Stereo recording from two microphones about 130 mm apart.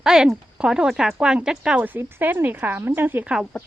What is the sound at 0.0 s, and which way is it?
Speech, 5° right (ahead or behind).